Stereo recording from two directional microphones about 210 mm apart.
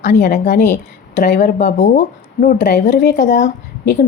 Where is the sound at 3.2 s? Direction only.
35° left (ahead or behind).